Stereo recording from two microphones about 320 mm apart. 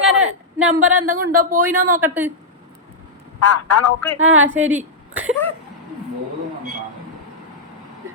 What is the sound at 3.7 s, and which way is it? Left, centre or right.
Speech, centre.